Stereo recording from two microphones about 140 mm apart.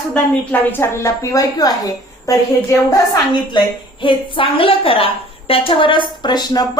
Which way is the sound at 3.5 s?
35° left (ahead or behind).